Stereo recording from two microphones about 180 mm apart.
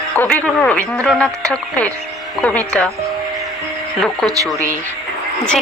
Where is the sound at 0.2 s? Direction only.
10° left (ahead or behind).